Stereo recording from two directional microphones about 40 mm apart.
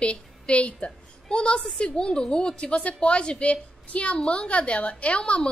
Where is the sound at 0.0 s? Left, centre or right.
Left.